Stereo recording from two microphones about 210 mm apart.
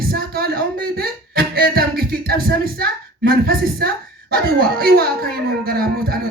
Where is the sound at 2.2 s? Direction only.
45° right (ahead or behind).